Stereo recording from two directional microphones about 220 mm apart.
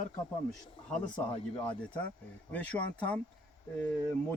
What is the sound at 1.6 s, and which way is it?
Speech, 5° left (ahead or behind).